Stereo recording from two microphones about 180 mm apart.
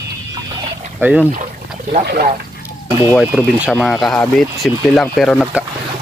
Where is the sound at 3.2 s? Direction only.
5° right (ahead or behind).